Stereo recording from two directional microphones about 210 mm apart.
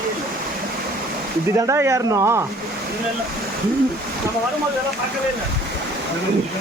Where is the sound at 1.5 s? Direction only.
15° right (ahead or behind).